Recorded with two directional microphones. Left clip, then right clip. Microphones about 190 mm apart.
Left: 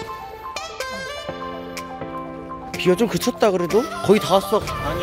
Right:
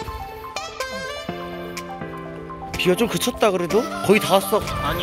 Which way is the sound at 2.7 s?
20° left (ahead or behind).